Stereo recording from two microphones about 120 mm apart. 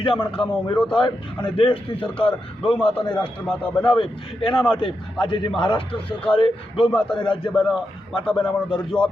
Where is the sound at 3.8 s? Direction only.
45° left (ahead or behind).